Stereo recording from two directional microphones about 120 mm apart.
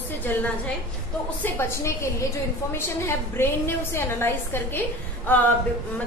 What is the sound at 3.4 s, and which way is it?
A woman's voice, 20° left (ahead or behind).